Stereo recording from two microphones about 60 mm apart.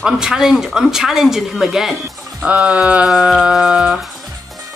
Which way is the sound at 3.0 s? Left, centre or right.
Centre.